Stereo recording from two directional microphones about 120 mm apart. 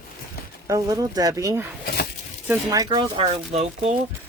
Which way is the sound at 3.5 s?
65° right (ahead or behind).